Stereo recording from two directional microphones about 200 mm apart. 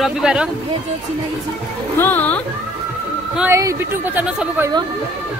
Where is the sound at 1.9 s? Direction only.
10° left (ahead or behind).